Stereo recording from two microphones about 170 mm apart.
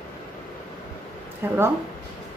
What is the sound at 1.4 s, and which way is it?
Speech, 15° right (ahead or behind).